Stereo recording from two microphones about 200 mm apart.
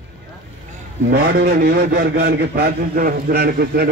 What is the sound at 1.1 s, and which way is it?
A man's voice, 50° right (ahead or behind).